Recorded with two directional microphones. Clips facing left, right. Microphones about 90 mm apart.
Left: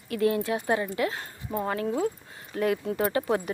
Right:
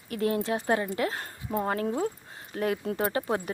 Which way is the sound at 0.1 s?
35° right (ahead or behind).